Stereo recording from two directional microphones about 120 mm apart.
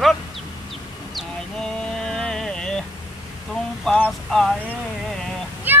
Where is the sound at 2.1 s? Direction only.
5° left (ahead or behind).